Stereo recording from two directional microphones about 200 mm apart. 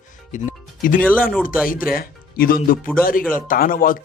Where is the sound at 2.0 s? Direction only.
45° left (ahead or behind).